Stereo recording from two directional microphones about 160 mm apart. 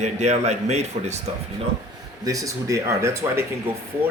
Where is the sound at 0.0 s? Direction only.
45° right (ahead or behind).